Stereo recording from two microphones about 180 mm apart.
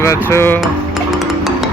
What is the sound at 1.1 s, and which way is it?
Music, centre (ahead or behind).